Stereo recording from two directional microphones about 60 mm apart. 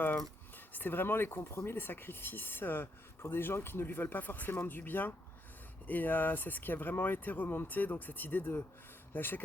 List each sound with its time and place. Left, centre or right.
0.0 s speech: left